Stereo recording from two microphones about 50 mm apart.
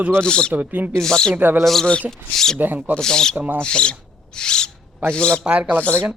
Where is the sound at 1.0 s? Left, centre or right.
Centre.